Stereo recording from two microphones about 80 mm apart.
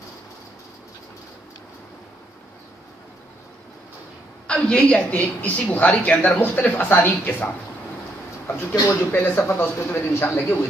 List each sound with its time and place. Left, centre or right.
4.5 s speech: centre
8.8 s speech: left